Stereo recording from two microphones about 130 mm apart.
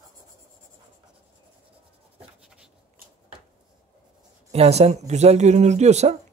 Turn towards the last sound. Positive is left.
turn(degrees=-60)  # may be behind; listen again after turning